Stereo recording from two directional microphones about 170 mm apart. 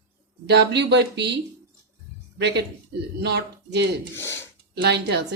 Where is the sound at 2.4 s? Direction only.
90° right.